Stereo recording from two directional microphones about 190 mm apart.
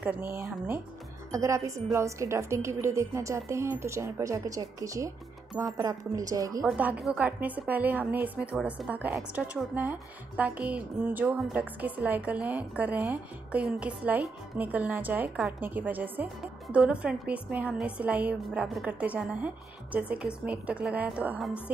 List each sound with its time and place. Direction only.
0.0 s a woman's voice: 10° right (ahead or behind)
6.6 s a woman's voice: 5° right (ahead or behind)